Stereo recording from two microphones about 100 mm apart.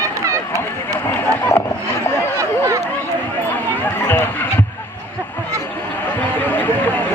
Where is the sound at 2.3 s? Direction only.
30° right (ahead or behind).